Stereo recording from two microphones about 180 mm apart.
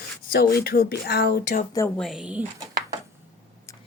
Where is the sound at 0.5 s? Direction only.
60° left (ahead or behind).